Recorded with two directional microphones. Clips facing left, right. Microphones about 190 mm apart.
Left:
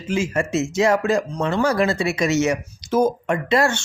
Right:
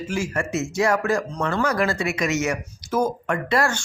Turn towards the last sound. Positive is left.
turn(degrees=25)  # may be behind; listen again after turning